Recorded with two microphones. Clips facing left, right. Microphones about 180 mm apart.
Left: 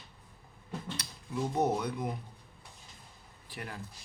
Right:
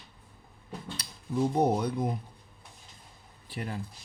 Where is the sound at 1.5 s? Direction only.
35° right (ahead or behind).